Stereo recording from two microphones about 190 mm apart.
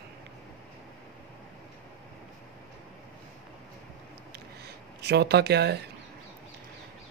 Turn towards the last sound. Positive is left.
turn(degrees=-60)  # may be behind; listen again after turning